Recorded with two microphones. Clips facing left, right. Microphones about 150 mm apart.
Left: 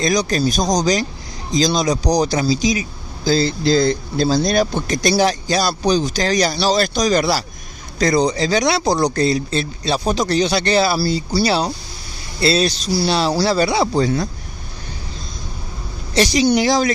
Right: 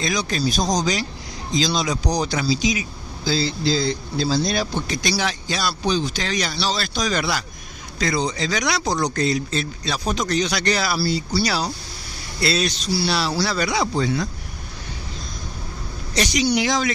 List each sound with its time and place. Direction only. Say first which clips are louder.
0.0 s speech: left 6 dB; 40° left (ahead or behind)
11.0 s speech: left 3 dB; 40° left (ahead or behind)
16.2 s speech: left 5 dB; 30° left (ahead or behind)